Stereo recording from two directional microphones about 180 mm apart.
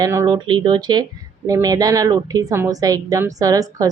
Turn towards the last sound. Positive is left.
turn(degrees=-20)  # may be behind; listen again after turning